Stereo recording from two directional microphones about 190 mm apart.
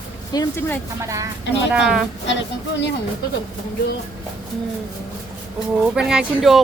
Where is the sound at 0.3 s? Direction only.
15° left (ahead or behind).